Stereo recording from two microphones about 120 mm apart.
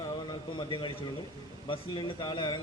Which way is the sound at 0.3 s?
40° left (ahead or behind).